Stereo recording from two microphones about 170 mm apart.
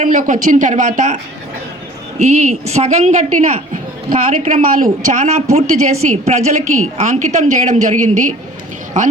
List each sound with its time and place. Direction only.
0.0 s a woman's voice: 45° right (ahead or behind)